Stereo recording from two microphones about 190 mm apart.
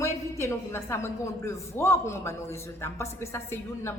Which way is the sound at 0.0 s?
15° left (ahead or behind).